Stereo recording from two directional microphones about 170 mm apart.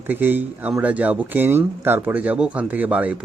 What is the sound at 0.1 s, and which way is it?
Speech, 10° right (ahead or behind).